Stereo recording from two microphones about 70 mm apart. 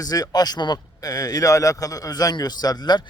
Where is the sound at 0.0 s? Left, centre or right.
Left.